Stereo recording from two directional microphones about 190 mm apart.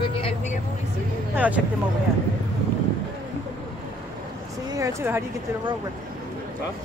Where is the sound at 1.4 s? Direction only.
5° right (ahead or behind).